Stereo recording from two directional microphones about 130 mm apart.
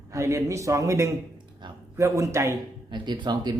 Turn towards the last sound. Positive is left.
turn(degrees=-35)  # may be behind; listen again after turning